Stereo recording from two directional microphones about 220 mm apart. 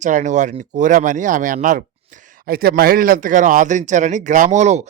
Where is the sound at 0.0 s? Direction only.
35° right (ahead or behind).